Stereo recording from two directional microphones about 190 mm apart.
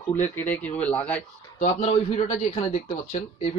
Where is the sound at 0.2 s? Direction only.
10° left (ahead or behind).